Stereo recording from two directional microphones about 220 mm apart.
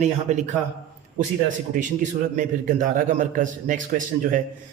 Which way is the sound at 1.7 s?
35° right (ahead or behind).